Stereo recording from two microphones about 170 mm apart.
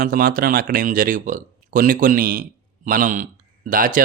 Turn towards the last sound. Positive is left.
turn(degrees=-55)  # may be behind; listen again after turning